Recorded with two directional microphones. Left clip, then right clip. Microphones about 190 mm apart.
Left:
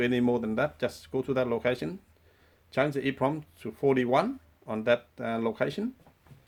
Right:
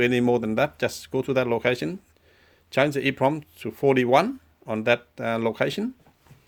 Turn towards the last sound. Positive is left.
turn(degrees=-45)  # may be behind; listen again after turning